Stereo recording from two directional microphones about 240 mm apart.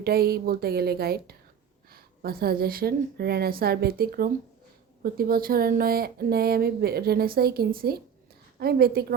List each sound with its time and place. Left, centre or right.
0.0 s speech: right